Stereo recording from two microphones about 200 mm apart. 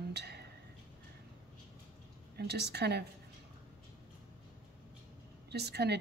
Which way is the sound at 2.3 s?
55° right (ahead or behind).